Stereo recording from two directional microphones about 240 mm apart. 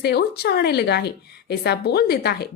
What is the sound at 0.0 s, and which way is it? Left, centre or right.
A woman's voice, left.